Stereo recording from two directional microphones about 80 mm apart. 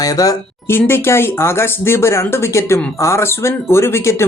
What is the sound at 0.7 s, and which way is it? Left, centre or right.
Speech, left.